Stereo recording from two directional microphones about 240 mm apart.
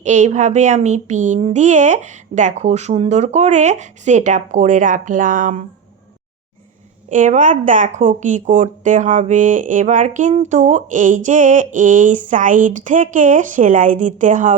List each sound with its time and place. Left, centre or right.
0.0 s speech: right
7.1 s speech: right